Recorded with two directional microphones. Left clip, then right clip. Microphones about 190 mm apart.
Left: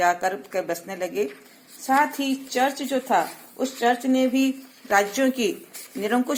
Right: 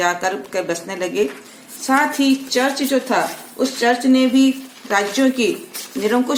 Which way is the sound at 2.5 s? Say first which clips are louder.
Right 2 dB; 30° left (ahead or behind).